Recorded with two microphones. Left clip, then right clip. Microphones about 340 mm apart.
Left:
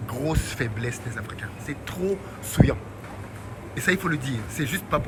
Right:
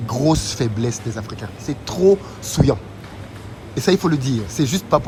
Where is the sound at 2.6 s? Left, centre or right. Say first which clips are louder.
Right 5 dB; left.